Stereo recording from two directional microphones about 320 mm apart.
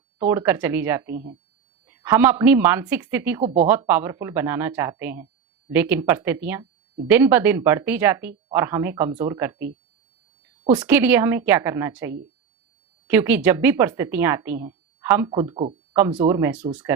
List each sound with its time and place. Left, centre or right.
0.3 s speech: centre
3.4 s speech: right
3.7 s a woman's voice: centre